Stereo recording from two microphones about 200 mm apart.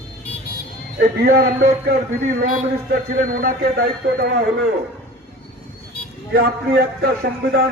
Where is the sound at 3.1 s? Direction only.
45° right (ahead or behind).